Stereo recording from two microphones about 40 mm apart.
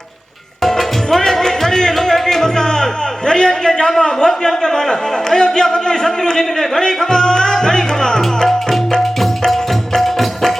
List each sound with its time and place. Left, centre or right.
0.6 s music: centre
3.8 s a man's voice: centre
8.9 s music: centre
9.5 s music: centre